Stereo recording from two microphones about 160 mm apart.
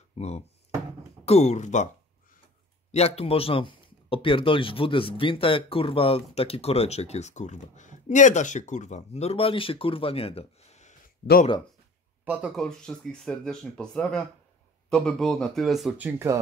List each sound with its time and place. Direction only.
0.2 s speech: 40° left (ahead or behind)
2.9 s speech: 40° left (ahead or behind)
12.3 s speech: 10° right (ahead or behind)
12.5 s speech: 5° left (ahead or behind)
16.1 s speech: 15° right (ahead or behind)